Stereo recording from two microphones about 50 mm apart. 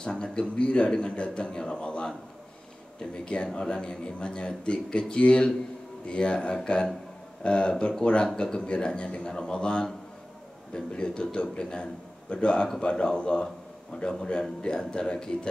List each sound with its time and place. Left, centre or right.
0.0 s a man's voice: centre